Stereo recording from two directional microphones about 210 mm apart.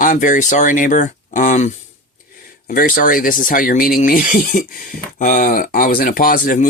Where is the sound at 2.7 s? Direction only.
40° left (ahead or behind).